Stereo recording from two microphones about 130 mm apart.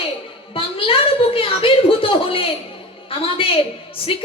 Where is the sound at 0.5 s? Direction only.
45° left (ahead or behind).